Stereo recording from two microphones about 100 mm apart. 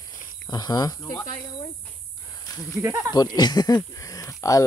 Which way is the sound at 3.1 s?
45° left (ahead or behind).